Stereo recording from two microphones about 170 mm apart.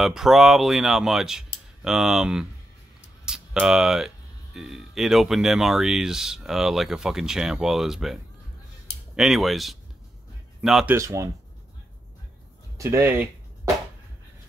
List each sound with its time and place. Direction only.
0.0 s speech: centre (ahead or behind)
11.0 s speech: 15° right (ahead or behind)
12.7 s speech: 15° right (ahead or behind)